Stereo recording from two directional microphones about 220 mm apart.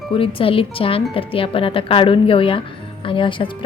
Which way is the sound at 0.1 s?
25° left (ahead or behind).